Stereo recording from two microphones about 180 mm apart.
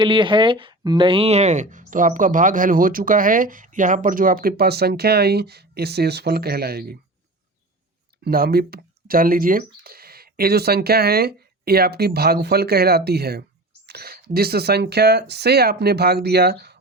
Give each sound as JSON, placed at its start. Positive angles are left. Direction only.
{"t": 0.0, "sound": "speech", "side_deg": -25}
{"t": 8.2, "sound": "speech", "side_deg": -55}